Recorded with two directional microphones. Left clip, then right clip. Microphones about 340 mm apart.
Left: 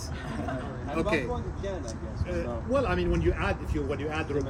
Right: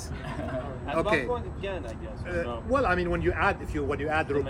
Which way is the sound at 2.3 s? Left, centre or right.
Centre.